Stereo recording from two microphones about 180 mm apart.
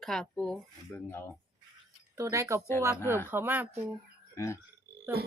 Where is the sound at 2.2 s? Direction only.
15° right (ahead or behind).